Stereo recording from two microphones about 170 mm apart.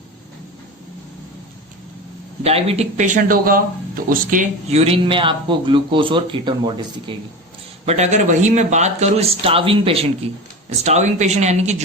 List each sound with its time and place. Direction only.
2.4 s speech: 35° right (ahead or behind); by 4.8 s 55° right (ahead or behind)
4.8 s speech: 30° right (ahead or behind)
7.9 s speech: 40° right (ahead or behind)